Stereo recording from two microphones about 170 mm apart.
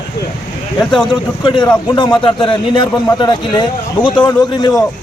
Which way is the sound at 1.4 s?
25° left (ahead or behind).